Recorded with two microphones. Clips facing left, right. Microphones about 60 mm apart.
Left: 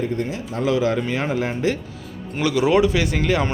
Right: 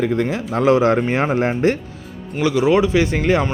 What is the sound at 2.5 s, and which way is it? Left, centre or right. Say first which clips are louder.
Speech: right 2 dB; centre.